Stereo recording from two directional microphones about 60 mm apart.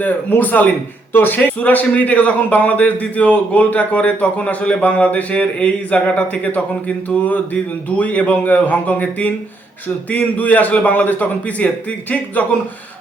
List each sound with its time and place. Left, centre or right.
0.0 s a man's voice: left